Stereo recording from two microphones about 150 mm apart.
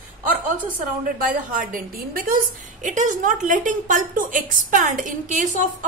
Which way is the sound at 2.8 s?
55° right (ahead or behind).